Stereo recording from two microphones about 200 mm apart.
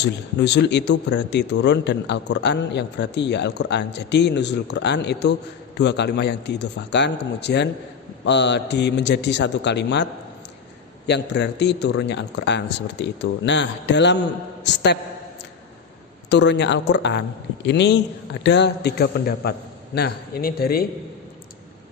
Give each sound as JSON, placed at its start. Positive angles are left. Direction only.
{"t": 0.0, "sound": "speech", "side_deg": 60}
{"t": 11.1, "sound": "speech", "side_deg": 60}
{"t": 16.3, "sound": "speech", "side_deg": 60}